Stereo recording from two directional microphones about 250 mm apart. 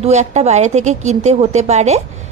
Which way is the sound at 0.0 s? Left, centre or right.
Right.